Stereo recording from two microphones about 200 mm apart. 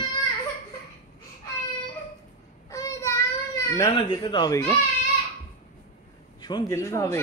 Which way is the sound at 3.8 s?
20° left (ahead or behind).